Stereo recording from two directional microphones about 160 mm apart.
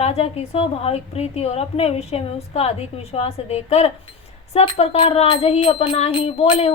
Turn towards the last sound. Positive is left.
turn(degrees=40)  # may be behind; listen again after turning